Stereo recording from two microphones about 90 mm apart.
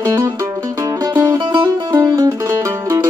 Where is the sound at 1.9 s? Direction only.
35° right (ahead or behind).